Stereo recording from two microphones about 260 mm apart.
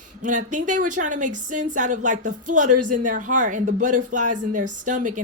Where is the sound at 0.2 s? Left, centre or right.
Right.